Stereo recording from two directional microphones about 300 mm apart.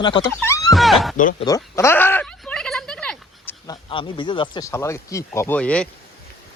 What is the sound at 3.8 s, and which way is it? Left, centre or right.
Speech, centre.